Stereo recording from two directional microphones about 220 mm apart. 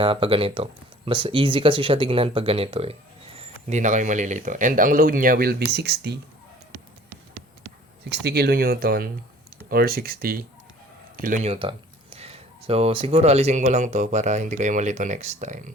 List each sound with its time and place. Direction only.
0.0 s speech: 25° right (ahead or behind); by 6.1 s 50° right (ahead or behind)
8.1 s speech: 50° right (ahead or behind)